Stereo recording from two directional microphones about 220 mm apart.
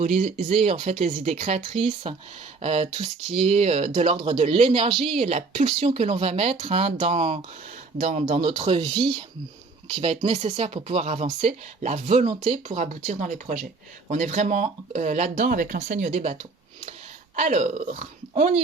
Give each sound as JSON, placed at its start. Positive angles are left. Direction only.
{"t": 0.0, "sound": "speech", "side_deg": -30}
{"t": 8.8, "sound": "speech", "side_deg": 5}
{"t": 9.9, "sound": "speech", "side_deg": -25}